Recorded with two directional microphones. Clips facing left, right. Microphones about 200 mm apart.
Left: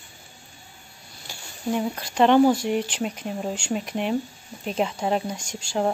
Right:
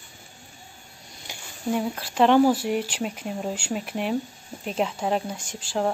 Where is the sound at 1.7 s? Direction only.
5° right (ahead or behind).